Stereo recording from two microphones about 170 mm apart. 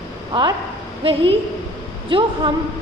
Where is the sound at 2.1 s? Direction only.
30° right (ahead or behind).